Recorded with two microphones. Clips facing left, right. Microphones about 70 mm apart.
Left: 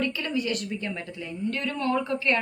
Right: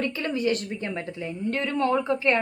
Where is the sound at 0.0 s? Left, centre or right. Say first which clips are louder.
Right 2 dB; right.